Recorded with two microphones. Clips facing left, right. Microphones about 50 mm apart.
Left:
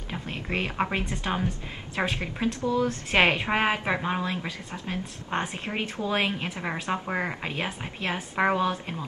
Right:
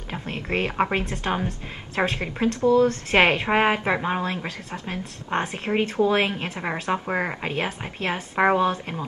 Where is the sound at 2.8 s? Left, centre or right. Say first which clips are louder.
Right 6 dB; right.